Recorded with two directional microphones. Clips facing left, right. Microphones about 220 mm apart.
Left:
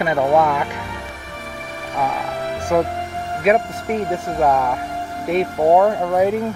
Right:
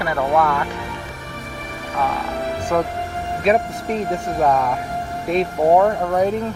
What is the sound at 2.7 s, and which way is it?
Speech, 10° left (ahead or behind).